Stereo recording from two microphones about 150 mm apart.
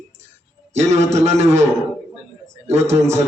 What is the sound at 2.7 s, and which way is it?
Speech, 50° right (ahead or behind).